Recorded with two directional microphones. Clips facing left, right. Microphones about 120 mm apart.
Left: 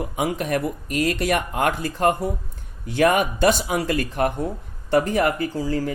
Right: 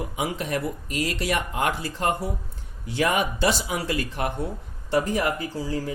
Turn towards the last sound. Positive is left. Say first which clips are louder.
# left 4 dB
turn(degrees=60)  # may be behind; listen again after turning